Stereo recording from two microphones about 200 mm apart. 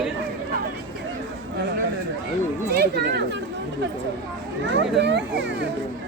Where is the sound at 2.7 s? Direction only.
55° right (ahead or behind).